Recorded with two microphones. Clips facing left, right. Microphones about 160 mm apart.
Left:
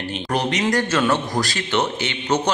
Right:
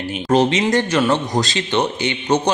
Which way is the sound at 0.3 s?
25° right (ahead or behind).